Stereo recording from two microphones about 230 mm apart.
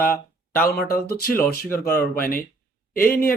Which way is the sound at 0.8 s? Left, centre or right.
Left.